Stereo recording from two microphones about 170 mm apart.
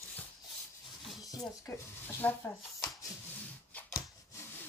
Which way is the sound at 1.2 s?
20° left (ahead or behind).